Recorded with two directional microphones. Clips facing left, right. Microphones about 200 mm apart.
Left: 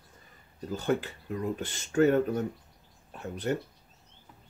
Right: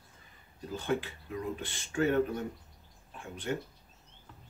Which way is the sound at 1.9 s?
45° left (ahead or behind).